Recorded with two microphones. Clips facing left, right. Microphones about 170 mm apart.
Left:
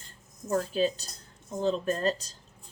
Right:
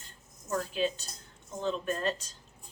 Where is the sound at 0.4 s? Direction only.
35° left (ahead or behind).